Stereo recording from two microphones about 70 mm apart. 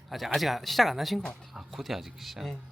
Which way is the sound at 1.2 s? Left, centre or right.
Centre.